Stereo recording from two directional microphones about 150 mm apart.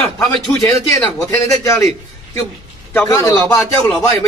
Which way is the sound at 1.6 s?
20° left (ahead or behind).